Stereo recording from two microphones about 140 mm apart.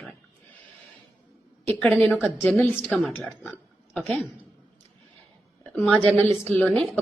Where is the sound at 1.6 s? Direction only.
15° left (ahead or behind).